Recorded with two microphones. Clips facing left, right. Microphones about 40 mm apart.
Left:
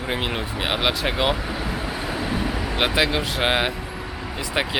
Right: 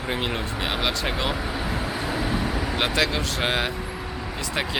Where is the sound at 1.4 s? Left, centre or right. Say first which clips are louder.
Even; centre.